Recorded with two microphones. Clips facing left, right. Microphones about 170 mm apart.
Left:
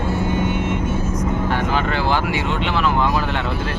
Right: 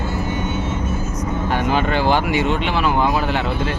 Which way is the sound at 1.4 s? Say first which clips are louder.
Right 6 dB; 15° right (ahead or behind).